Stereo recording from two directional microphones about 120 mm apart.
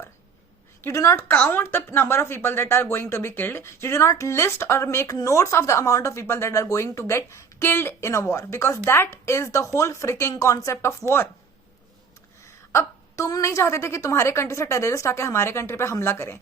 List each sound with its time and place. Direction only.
0.8 s a woman's voice: 25° left (ahead or behind)
12.7 s a woman's voice: 25° left (ahead or behind)